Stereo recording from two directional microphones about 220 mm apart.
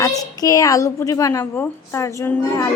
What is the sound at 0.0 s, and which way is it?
A woman's voice, 15° left (ahead or behind).